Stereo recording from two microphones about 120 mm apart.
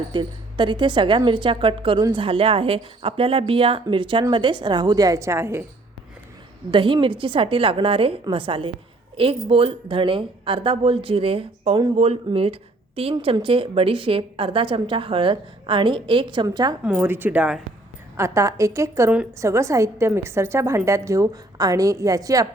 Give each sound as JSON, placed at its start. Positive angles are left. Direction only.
{"t": 0.1, "sound": "a woman's voice", "side_deg": -40}
{"t": 6.7, "sound": "speech", "side_deg": -45}
{"t": 17.0, "sound": "a woman's voice", "side_deg": -15}
{"t": 18.2, "sound": "a woman's voice", "side_deg": -25}